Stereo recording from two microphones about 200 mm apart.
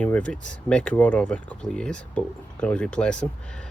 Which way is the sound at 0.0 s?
5° left (ahead or behind).